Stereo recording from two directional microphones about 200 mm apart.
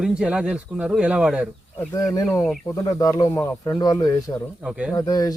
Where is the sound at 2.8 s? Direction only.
15° left (ahead or behind).